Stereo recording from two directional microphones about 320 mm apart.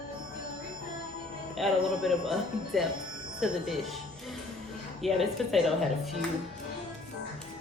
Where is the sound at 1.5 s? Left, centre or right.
Centre.